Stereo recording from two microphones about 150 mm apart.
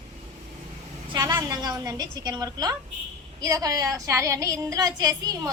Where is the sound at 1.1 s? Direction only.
25° right (ahead or behind).